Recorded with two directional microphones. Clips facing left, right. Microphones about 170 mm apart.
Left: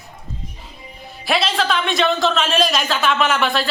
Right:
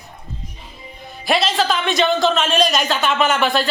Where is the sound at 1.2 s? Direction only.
Centre (ahead or behind).